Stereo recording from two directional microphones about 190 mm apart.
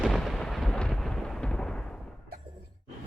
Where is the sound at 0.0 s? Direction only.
Centre (ahead or behind).